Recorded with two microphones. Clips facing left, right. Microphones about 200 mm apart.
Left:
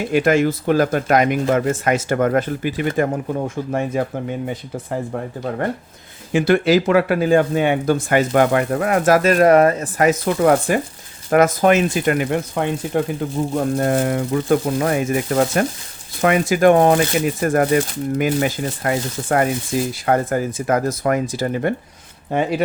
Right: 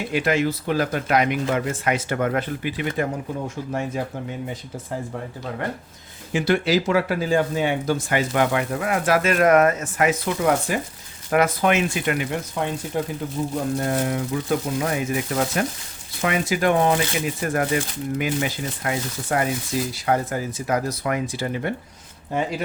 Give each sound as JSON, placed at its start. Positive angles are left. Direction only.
{"t": 0.1, "sound": "speech", "side_deg": 45}
{"t": 6.3, "sound": "speech", "side_deg": 55}
{"t": 11.3, "sound": "speech", "side_deg": 45}
{"t": 22.3, "sound": "speech", "side_deg": 65}